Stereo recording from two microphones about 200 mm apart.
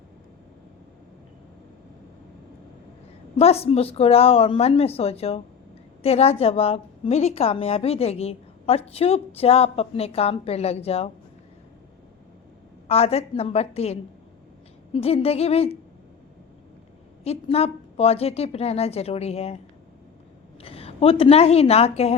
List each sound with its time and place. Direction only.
3.3 s a woman's voice: 30° left (ahead or behind)
12.9 s a woman's voice: 30° left (ahead or behind)
17.2 s a woman's voice: 30° left (ahead or behind)
20.6 s a woman's voice: 30° left (ahead or behind)